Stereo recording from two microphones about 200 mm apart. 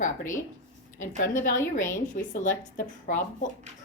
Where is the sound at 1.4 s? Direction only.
40° left (ahead or behind).